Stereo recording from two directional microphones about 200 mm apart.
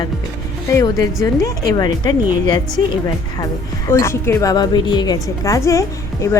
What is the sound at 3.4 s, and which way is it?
A woman's voice, 15° left (ahead or behind).